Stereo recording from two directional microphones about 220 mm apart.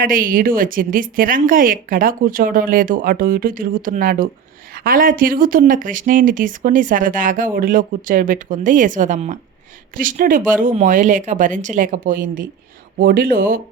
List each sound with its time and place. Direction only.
0.0 s speech: 40° right (ahead or behind)